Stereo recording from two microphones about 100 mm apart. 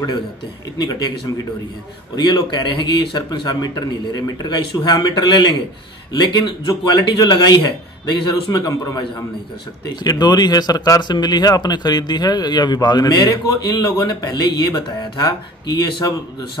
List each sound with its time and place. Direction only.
0.7 s speech: 45° left (ahead or behind)